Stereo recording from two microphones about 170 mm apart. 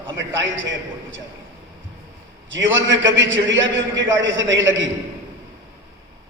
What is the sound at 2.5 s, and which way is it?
A man's voice, 90° right.